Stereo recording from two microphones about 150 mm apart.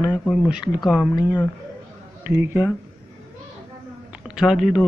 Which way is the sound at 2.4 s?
15° right (ahead or behind).